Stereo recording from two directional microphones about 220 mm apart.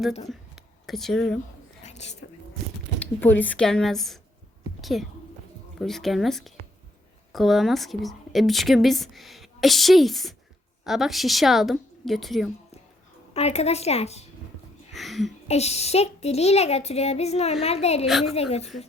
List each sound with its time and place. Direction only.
0.3 s a sound: centre (ahead or behind)
1.8 s whispering: 30° left (ahead or behind)
3.0 s a woman's voice: 10° left (ahead or behind)
13.3 s speech: 30° left (ahead or behind)
14.9 s speech: centre (ahead or behind)
15.4 s speech: 30° left (ahead or behind)
18.0 s a woman's voice: centre (ahead or behind)